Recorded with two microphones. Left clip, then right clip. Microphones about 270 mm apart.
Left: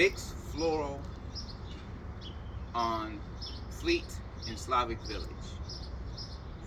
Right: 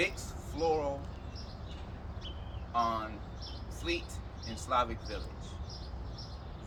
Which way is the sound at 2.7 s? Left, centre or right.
Centre.